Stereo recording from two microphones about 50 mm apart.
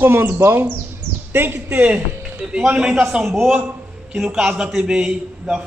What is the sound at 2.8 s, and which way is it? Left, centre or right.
Speech, centre.